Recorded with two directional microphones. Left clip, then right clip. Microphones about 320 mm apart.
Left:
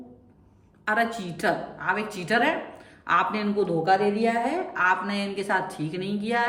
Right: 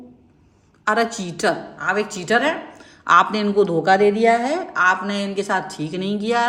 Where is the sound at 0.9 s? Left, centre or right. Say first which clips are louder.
Right 5 dB; centre.